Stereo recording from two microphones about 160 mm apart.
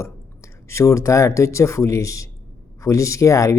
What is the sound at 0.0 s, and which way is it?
Speech, 15° left (ahead or behind).